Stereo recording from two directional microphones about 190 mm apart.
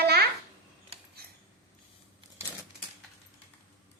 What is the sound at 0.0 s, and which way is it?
Babbling, 55° right (ahead or behind).